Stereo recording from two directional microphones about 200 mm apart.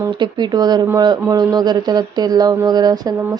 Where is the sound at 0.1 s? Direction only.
20° right (ahead or behind).